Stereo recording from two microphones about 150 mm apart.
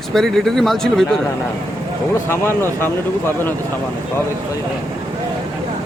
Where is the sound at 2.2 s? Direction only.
15° left (ahead or behind).